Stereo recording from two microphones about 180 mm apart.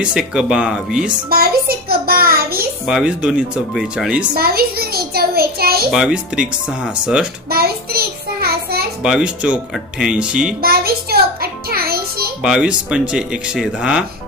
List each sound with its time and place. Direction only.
0.0 s speech: 5° right (ahead or behind)
1.3 s child singing: 55° right (ahead or behind)
2.8 s speech: 5° right (ahead or behind)
4.4 s child singing: 55° right (ahead or behind)
5.9 s speech: 5° right (ahead or behind)
7.5 s child singing: 55° right (ahead or behind)
9.0 s speech: 5° right (ahead or behind)
10.6 s music: 55° right (ahead or behind)
12.4 s speech: 5° right (ahead or behind)